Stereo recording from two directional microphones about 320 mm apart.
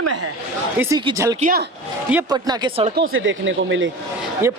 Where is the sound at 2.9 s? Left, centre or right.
Right.